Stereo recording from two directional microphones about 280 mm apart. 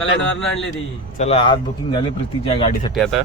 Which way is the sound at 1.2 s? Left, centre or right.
Left.